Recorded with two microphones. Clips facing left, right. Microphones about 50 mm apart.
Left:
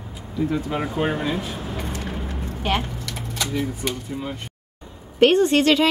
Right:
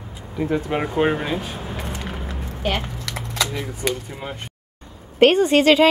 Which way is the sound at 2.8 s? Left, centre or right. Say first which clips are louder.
Right 1 dB; right.